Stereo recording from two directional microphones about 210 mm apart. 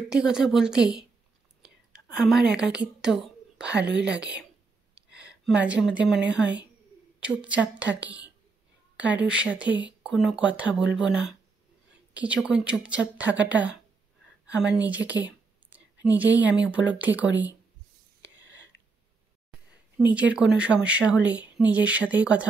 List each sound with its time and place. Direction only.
0.1 s speech: 5° right (ahead or behind)
1.6 s whispering: centre (ahead or behind)
4.9 s a woman's voice: 5° right (ahead or behind)
18.7 s a sound: 60° left (ahead or behind)
20.1 s speech: 5° right (ahead or behind)